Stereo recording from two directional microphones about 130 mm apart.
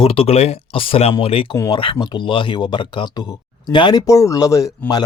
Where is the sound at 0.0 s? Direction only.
45° left (ahead or behind).